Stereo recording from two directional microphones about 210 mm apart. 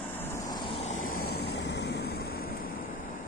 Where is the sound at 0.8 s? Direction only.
35° left (ahead or behind).